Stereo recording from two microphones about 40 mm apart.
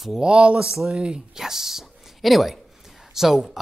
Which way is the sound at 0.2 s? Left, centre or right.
Right.